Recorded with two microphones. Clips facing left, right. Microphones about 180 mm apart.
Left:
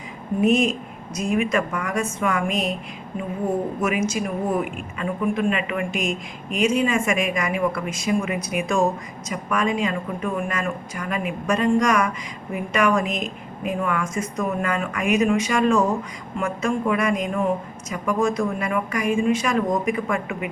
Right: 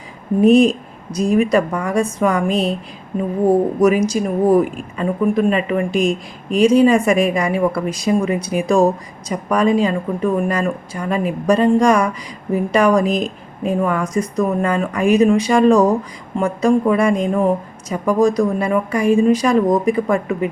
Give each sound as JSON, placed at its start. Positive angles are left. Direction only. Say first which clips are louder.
{"t": 0.4, "sound": "a woman's voice", "louder": "right 8 dB", "side_deg": -35}